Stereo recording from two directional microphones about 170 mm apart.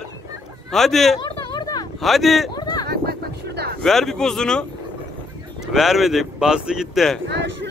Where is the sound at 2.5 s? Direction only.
25° left (ahead or behind).